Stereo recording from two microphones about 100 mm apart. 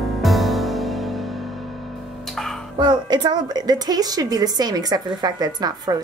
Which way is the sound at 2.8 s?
45° right (ahead or behind).